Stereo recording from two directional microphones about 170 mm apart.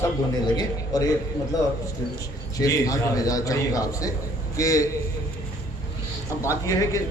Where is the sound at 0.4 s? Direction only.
20° left (ahead or behind).